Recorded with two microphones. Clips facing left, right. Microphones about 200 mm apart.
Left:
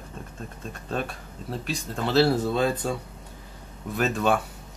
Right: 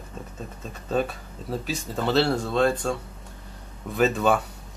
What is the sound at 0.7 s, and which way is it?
Speech, centre (ahead or behind).